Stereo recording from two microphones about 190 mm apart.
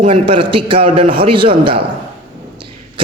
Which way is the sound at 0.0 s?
30° right (ahead or behind).